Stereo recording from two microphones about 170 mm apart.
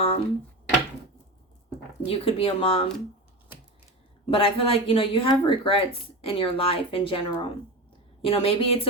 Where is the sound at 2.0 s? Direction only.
35° left (ahead or behind).